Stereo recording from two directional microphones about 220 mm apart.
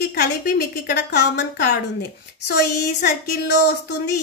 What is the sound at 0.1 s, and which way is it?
A woman's voice, 45° left (ahead or behind).